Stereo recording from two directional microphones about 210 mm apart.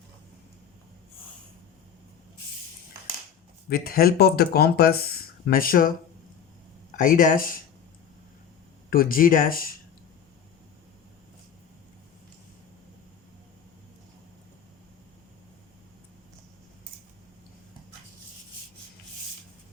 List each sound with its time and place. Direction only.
3.7 s speech: 45° left (ahead or behind)
7.0 s speech: 40° left (ahead or behind)
8.9 s speech: 40° left (ahead or behind)